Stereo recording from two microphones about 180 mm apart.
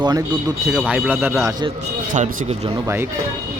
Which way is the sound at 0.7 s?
Centre (ahead or behind).